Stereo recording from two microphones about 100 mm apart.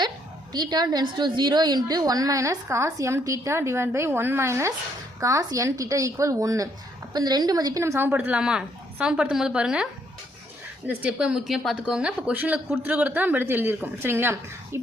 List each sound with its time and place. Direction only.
0.5 s a woman's voice: 45° right (ahead or behind); by 14.8 s 25° right (ahead or behind)